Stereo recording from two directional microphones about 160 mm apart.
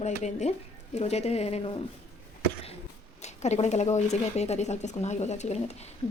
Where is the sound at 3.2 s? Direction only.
45° left (ahead or behind).